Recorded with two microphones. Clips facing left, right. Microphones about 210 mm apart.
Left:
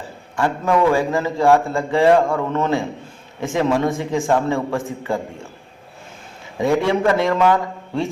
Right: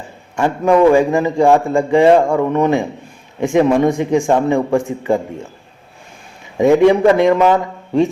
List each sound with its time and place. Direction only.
0.3 s a man's voice: 15° right (ahead or behind)
6.6 s a man's voice: 20° right (ahead or behind)